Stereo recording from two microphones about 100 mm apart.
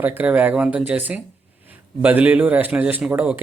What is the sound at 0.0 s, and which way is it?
Speech, 15° right (ahead or behind).